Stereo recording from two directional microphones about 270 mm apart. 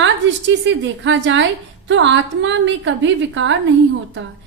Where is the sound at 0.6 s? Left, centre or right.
Right.